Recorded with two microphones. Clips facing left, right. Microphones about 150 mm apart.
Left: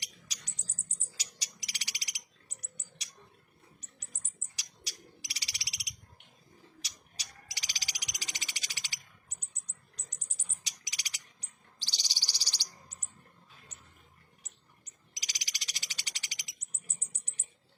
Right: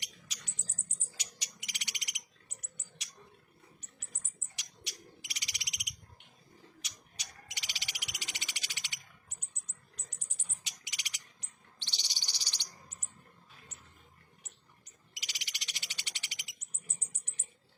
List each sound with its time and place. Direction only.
0.3 s mouse: 40° left (ahead or behind)
0.9 s frog: 35° left (ahead or behind)
4.5 s frog: 35° left (ahead or behind)
6.8 s frog: 35° left (ahead or behind)
10.5 s cricket: 35° left (ahead or behind)
14.4 s frog: 40° left (ahead or behind)